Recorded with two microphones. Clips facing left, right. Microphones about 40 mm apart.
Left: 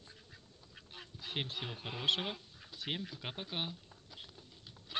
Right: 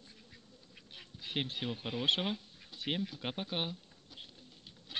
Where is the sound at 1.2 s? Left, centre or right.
Centre.